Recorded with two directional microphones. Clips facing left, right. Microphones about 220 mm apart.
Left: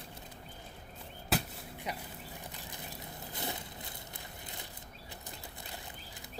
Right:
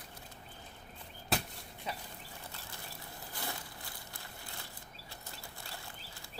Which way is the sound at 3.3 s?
20° left (ahead or behind).